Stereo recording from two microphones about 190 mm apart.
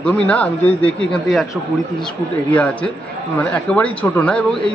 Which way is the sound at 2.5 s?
5° left (ahead or behind).